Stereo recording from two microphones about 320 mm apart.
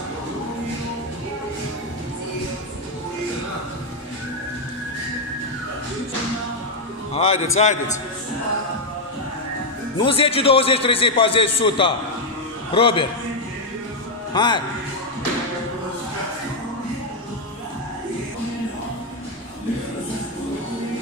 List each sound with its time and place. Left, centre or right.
7.2 s speech: centre
10.0 s a man's voice: centre
14.3 s speech: centre